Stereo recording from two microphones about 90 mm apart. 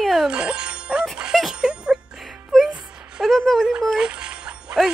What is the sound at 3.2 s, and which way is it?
Speech, centre (ahead or behind).